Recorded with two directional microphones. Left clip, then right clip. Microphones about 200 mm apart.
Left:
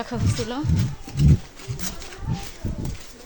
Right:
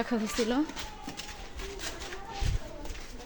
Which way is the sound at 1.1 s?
Centre (ahead or behind).